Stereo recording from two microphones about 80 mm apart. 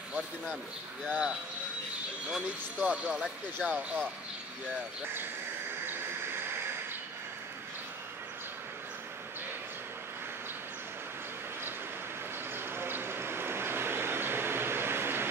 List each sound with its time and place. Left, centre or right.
1.0 s speech: centre
12.5 s vehicle: right